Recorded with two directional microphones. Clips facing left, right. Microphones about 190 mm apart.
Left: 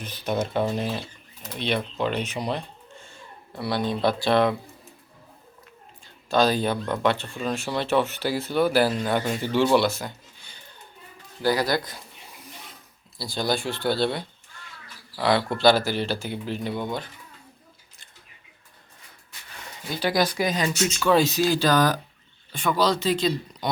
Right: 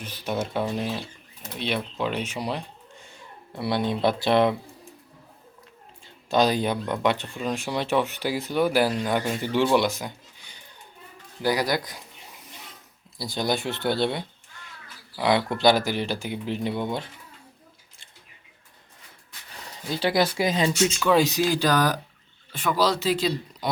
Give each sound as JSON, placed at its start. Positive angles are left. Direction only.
{"t": 0.0, "sound": "speech", "side_deg": -5}
{"t": 3.5, "sound": "speech", "side_deg": -20}
{"t": 6.3, "sound": "speech", "side_deg": -20}
{"t": 9.7, "sound": "a sound", "side_deg": -15}
{"t": 11.4, "sound": "speech", "side_deg": -15}
{"t": 13.1, "sound": "speech", "side_deg": -20}
{"t": 19.6, "sound": "speech", "side_deg": -30}
{"t": 21.0, "sound": "speech", "side_deg": -15}